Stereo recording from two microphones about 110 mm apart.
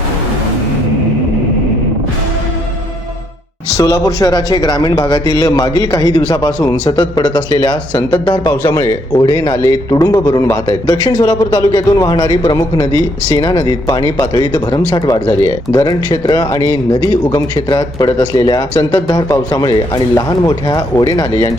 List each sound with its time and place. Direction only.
3.8 s a man's voice: 30° left (ahead or behind); by 8.4 s 50° left (ahead or behind)
8.4 s a man's voice: 30° left (ahead or behind)
9.6 s a man's voice: 30° left (ahead or behind)